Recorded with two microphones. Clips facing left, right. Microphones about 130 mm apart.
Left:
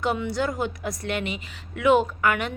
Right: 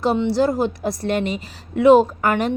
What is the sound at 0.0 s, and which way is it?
A woman's voice, 30° right (ahead or behind).